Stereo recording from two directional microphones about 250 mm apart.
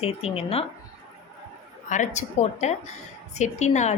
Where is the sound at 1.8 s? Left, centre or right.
Left.